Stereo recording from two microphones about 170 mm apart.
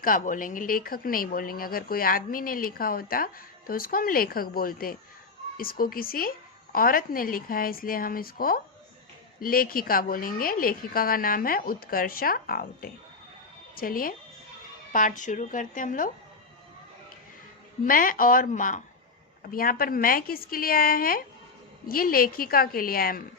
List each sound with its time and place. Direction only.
0.0 s a woman's voice: 55° left (ahead or behind)
17.8 s speech: 55° left (ahead or behind)